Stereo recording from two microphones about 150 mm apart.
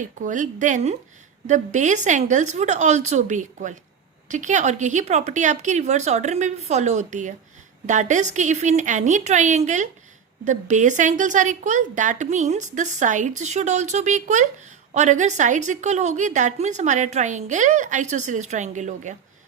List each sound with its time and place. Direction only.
0.0 s a woman's voice: 60° right (ahead or behind)